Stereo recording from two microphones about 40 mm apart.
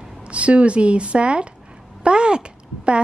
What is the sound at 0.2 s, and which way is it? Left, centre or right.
A woman's voice, right.